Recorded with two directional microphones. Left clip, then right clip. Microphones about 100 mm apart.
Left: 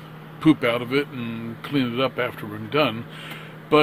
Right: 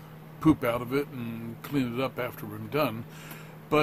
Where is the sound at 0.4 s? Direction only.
15° right (ahead or behind).